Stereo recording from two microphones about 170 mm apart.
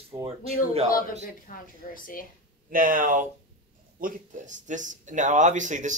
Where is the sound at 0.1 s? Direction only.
30° right (ahead or behind).